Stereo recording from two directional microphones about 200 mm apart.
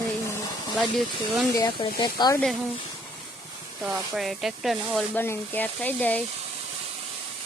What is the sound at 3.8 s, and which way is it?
Speech, 5° right (ahead or behind).